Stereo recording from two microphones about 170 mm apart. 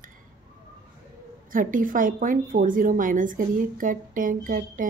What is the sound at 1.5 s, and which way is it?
A woman's voice, 50° right (ahead or behind).